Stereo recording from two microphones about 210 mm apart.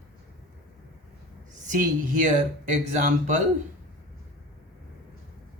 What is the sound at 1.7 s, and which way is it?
Speech, 40° right (ahead or behind).